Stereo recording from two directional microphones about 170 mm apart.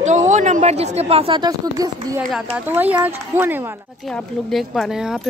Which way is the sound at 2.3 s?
10° right (ahead or behind).